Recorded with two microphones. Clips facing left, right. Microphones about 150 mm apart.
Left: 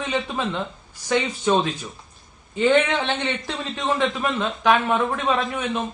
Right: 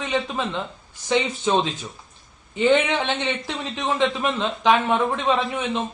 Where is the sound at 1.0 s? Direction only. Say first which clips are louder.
Even; 15° right (ahead or behind).